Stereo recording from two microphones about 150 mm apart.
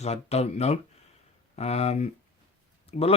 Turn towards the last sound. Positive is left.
turn(degrees=40)  # may be behind; listen again after turning